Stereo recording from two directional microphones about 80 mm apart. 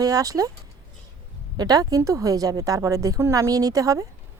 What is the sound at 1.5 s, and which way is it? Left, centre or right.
A woman's voice, right.